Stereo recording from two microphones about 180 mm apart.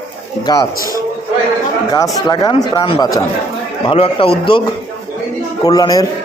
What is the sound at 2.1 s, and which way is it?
Speech, 20° left (ahead or behind).